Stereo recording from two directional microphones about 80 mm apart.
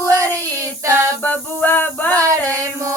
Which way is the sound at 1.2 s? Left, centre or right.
Left.